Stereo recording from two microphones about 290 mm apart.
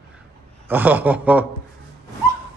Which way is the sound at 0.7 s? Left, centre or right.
Centre.